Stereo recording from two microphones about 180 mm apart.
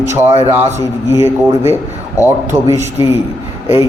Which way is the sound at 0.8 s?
15° right (ahead or behind).